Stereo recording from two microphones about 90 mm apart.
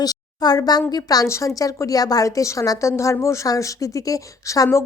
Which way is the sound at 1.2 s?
30° left (ahead or behind).